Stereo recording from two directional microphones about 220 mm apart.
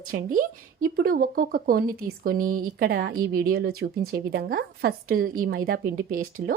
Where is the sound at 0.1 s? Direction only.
40° right (ahead or behind).